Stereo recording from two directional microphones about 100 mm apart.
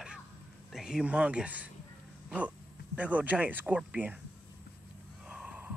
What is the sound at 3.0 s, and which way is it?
Speech, 15° right (ahead or behind).